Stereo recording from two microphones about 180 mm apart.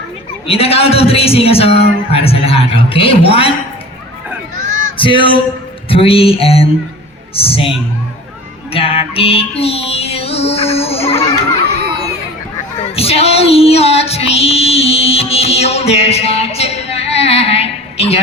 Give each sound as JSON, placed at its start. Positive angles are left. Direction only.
{"t": 0.4, "sound": "a woman's voice", "side_deg": 35}
{"t": 4.9, "sound": "a woman's voice", "side_deg": 30}
{"t": 8.7, "sound": "music", "side_deg": 30}
{"t": 11.8, "sound": "a sound", "side_deg": -65}
{"t": 13.0, "sound": "female singing", "side_deg": 35}